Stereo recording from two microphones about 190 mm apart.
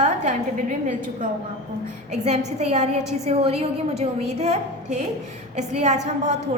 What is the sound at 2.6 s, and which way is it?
A woman's voice, 35° right (ahead or behind).